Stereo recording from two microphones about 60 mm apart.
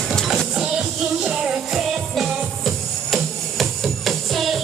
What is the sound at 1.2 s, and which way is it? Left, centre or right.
Music, centre.